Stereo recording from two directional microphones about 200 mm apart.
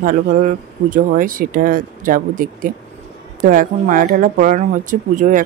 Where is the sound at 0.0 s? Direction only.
40° right (ahead or behind).